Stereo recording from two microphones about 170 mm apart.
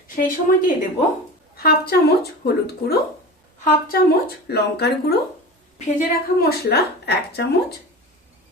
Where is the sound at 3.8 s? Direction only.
65° left (ahead or behind).